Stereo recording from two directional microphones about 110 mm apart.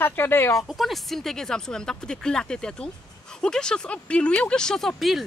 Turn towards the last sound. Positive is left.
turn(degrees=0)  # may be behind; listen again after turning